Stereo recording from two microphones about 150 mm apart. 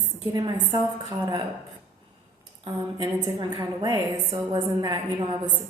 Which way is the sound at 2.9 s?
30° right (ahead or behind).